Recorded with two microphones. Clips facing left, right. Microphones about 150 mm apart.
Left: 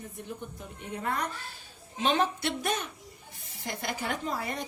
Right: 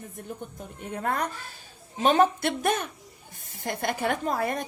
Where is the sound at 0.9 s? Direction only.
50° right (ahead or behind).